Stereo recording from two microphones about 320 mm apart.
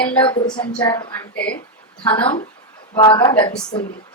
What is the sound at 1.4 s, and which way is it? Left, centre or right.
Speech, left.